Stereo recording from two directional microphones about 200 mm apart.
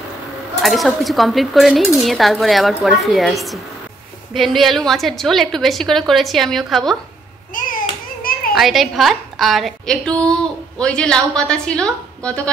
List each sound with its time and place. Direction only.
0.6 s a woman's voice: centre (ahead or behind)
7.5 s a sound: 40° left (ahead or behind)
8.2 s children playing: 45° left (ahead or behind)
8.5 s a woman's voice: centre (ahead or behind)